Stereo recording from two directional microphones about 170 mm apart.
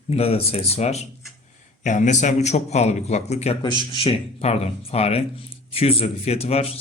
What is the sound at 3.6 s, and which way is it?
Speech, 25° left (ahead or behind).